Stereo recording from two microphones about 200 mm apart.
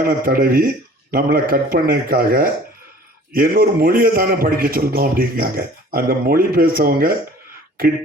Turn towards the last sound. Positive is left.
turn(degrees=-45)  # may be behind; listen again after turning